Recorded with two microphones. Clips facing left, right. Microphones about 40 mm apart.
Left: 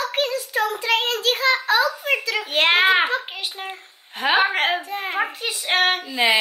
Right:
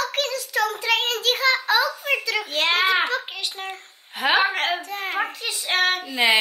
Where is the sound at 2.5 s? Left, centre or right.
Left.